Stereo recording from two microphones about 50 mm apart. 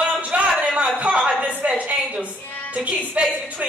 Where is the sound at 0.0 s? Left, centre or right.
Right.